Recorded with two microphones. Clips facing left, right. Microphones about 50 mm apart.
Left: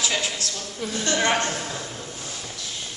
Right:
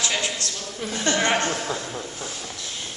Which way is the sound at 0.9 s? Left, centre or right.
Right.